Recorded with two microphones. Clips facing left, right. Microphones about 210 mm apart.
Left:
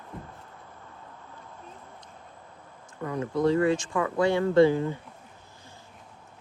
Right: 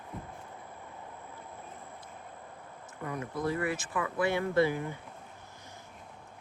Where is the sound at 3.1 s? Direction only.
30° left (ahead or behind).